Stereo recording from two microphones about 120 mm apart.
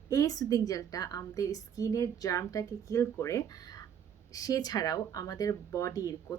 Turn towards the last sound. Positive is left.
turn(degrees=30)  # may be behind; listen again after turning